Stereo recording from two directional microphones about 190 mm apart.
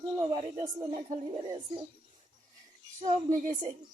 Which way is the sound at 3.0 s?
40° right (ahead or behind).